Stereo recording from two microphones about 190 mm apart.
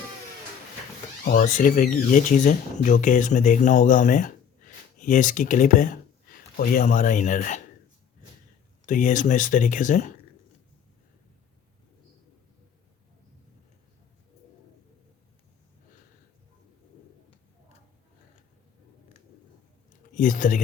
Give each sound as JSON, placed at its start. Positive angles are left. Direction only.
{"t": 1.2, "sound": "speech", "side_deg": 45}
{"t": 8.9, "sound": "speech", "side_deg": 40}
{"t": 20.1, "sound": "speech", "side_deg": 45}